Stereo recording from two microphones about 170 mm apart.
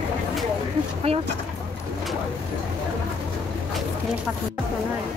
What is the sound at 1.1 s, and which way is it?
Speech, 35° right (ahead or behind).